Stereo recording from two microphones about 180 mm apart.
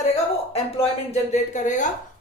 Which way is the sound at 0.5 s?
35° left (ahead or behind).